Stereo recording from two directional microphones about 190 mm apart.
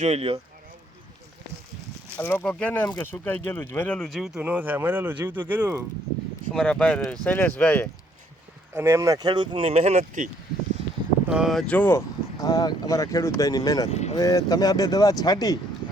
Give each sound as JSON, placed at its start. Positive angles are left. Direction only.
{"t": 0.0, "sound": "speech", "side_deg": -30}
{"t": 2.1, "sound": "speech", "side_deg": 10}
{"t": 6.5, "sound": "speech", "side_deg": 5}
{"t": 8.7, "sound": "speech", "side_deg": -15}
{"t": 11.3, "sound": "speech", "side_deg": 0}
{"t": 13.9, "sound": "speech", "side_deg": 35}
{"t": 14.2, "sound": "speech", "side_deg": 20}